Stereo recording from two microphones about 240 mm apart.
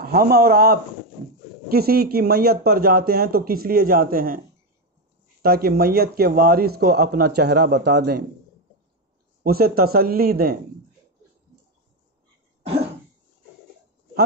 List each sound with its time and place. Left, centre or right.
0.0 s speech: right
5.4 s speech: right
9.4 s speech: right
12.6 s cough: right